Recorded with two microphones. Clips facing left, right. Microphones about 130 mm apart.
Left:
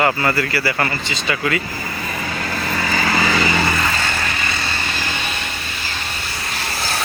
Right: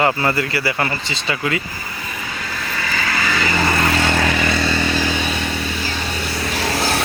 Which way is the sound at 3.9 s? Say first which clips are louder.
Right 6 dB; 75° right (ahead or behind).